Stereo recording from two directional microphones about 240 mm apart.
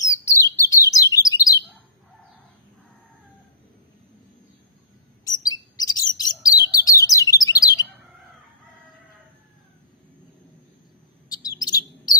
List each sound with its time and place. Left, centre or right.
0.0 s chirp: centre
5.2 s chirp: centre
11.2 s chirp: centre